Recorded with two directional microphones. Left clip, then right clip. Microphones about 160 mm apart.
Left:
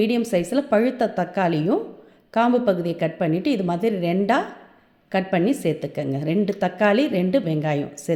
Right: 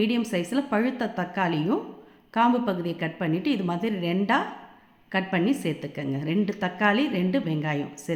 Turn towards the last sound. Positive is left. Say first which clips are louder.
# left 6 dB
turn(degrees=30)  # may be behind; listen again after turning